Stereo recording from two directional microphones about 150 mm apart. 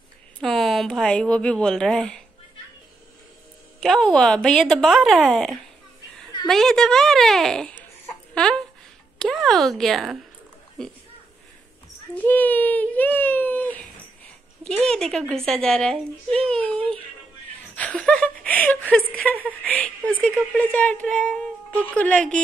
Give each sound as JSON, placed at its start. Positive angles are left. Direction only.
{"t": 0.4, "sound": "a woman's voice", "side_deg": 0}
{"t": 3.8, "sound": "a child's voice", "side_deg": 5}
{"t": 12.2, "sound": "a child's voice", "side_deg": 10}
{"t": 14.9, "sound": "a child's voice", "side_deg": 5}